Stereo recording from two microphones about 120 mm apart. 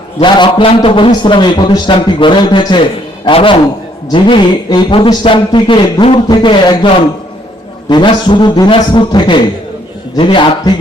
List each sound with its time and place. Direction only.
0.2 s a man's voice: 40° left (ahead or behind)